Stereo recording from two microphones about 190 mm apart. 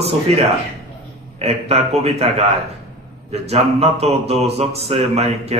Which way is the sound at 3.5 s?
35° right (ahead or behind).